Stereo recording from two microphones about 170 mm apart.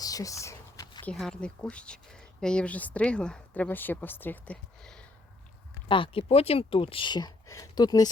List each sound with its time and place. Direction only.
0.0 s a sound: 20° left (ahead or behind)
1.0 s speech: 5° left (ahead or behind)
5.9 s speech: 30° left (ahead or behind)